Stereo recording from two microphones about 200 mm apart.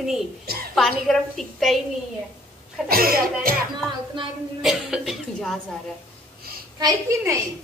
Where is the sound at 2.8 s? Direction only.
50° right (ahead or behind).